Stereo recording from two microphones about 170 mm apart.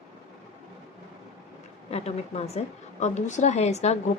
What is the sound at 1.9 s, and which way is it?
A woman's voice, 40° left (ahead or behind).